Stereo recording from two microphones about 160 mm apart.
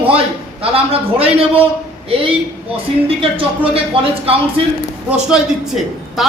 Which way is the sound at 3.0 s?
35° right (ahead or behind).